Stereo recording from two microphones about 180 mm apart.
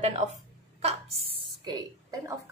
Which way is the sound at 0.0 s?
40° right (ahead or behind).